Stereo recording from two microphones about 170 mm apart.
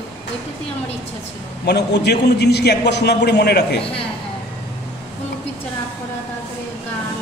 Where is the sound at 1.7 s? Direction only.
80° left.